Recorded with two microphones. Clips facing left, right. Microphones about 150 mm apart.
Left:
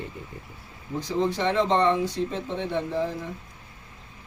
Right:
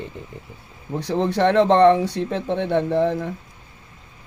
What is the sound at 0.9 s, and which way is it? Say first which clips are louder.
Speech: right 5 dB; 65° right (ahead or behind).